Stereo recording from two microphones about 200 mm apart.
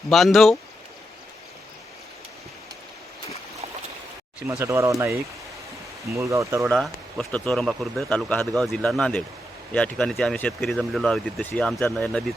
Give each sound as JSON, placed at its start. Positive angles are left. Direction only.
{"t": 0.1, "sound": "speech", "side_deg": 0}
{"t": 4.4, "sound": "speech", "side_deg": -15}
{"t": 6.7, "sound": "speech", "side_deg": 0}